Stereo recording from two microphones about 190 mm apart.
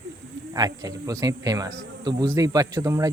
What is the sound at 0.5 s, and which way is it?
Speech, 20° right (ahead or behind).